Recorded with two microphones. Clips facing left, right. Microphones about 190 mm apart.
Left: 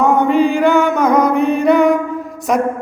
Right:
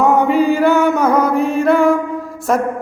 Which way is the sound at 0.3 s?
5° right (ahead or behind).